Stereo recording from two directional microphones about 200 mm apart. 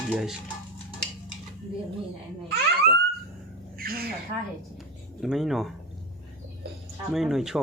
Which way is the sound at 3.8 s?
50° right (ahead or behind).